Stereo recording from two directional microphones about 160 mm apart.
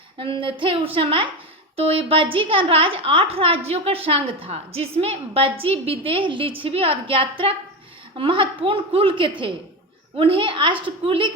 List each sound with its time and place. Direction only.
0.2 s a woman's voice: 35° right (ahead or behind)